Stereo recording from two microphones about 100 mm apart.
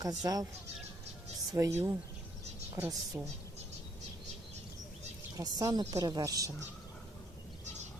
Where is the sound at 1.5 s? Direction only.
30° right (ahead or behind).